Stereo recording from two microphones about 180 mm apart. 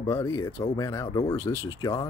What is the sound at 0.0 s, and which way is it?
Speech, 15° left (ahead or behind).